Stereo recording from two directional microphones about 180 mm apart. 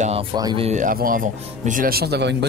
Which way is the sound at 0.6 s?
45° right (ahead or behind).